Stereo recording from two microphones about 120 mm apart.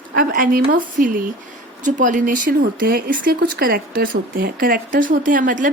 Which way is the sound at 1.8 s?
90° right.